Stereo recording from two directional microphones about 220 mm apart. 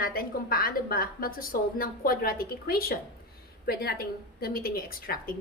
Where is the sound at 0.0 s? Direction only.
40° left (ahead or behind).